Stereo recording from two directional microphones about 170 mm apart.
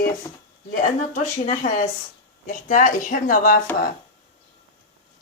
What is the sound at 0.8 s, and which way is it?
A woman's voice, 45° left (ahead or behind).